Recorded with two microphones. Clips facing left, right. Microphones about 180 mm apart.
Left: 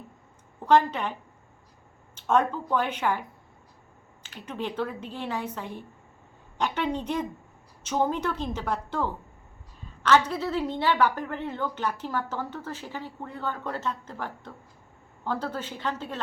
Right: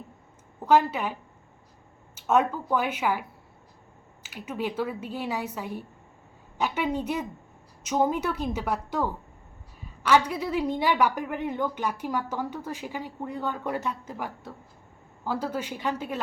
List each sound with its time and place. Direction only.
0.7 s a woman's voice: 5° right (ahead or behind)
2.1 s a woman's voice: 5° right (ahead or behind)